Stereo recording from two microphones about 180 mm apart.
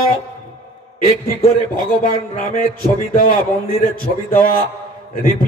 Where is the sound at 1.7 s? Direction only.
50° left (ahead or behind).